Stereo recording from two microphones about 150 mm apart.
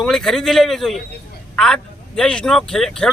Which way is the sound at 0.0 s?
Centre (ahead or behind).